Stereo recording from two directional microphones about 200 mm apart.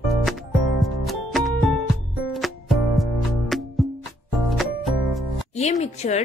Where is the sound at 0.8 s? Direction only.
Centre (ahead or behind).